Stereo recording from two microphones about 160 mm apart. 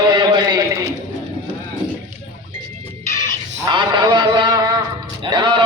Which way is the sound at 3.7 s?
30° right (ahead or behind).